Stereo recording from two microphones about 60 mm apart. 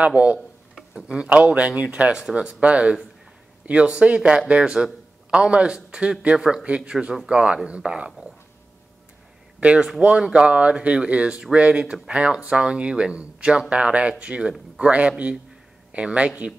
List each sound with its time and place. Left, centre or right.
0.0 s a man's voice: right
9.6 s speech: centre